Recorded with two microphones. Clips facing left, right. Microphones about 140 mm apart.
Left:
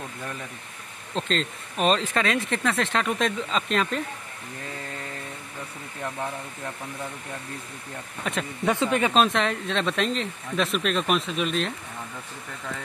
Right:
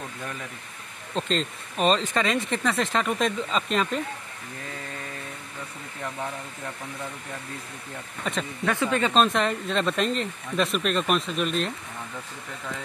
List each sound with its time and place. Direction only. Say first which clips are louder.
1.1 s speech: even; centre (ahead or behind)
8.2 s speech: even; 5° left (ahead or behind)
8.6 s speech: left 2 dB; 20° left (ahead or behind)
9.1 s speech: even; centre (ahead or behind)